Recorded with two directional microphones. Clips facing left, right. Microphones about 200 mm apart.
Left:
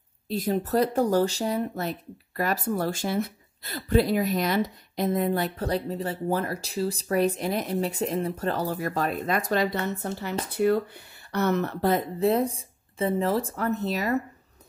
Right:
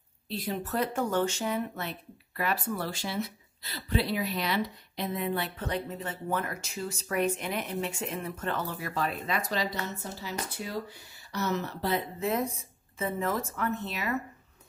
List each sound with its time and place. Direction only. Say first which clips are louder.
0.3 s speech: left 8 dB; 45° left (ahead or behind)
12.2 s speech: left 7 dB; 30° left (ahead or behind)